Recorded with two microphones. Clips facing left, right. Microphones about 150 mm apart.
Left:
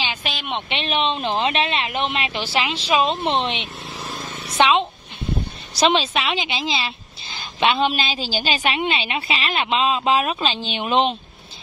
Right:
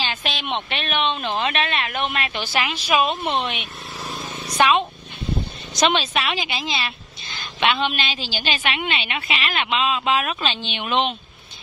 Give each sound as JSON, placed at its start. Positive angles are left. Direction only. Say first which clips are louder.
{"t": 0.0, "sound": "a sound", "louder": "right 1 dB", "side_deg": 10}
{"t": 0.7, "sound": "a woman's voice", "louder": "left 3 dB", "side_deg": 25}
{"t": 6.2, "sound": "a woman's voice", "louder": "left 2 dB", "side_deg": 25}